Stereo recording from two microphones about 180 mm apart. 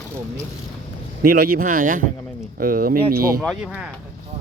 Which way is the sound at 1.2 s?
55° right (ahead or behind).